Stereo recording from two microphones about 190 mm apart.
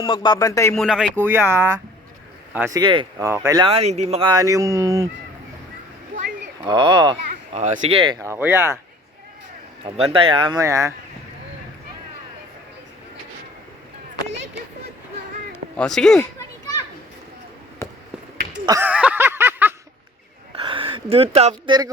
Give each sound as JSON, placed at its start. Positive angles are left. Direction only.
{"t": 0.0, "sound": "speech", "side_deg": 25}
{"t": 0.7, "sound": "speech", "side_deg": 0}
{"t": 1.1, "sound": "speech", "side_deg": -10}
{"t": 3.7, "sound": "a child's voice", "side_deg": -30}
{"t": 6.6, "sound": "a child's voice", "side_deg": -25}
{"t": 7.3, "sound": "a child's voice", "side_deg": -40}
{"t": 9.8, "sound": "a child's voice", "side_deg": -30}
{"t": 15.8, "sound": "speech", "side_deg": 5}
{"t": 18.6, "sound": "speech", "side_deg": -20}
{"t": 18.9, "sound": "a sound", "side_deg": -5}
{"t": 20.6, "sound": "speech", "side_deg": -25}